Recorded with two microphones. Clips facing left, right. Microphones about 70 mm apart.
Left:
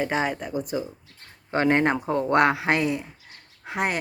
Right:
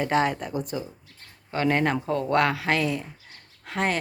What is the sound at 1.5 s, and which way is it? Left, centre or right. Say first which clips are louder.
Speech: left 3 dB; left.